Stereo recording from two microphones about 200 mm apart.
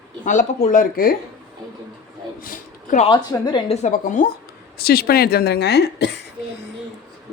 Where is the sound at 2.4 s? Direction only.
40° left (ahead or behind).